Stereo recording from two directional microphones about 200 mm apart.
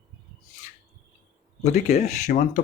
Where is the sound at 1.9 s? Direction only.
35° left (ahead or behind).